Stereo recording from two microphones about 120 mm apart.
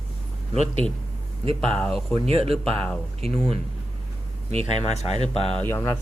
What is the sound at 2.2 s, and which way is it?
Speech, 55° right (ahead or behind).